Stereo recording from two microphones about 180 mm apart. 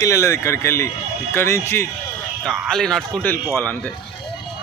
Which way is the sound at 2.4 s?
Centre (ahead or behind).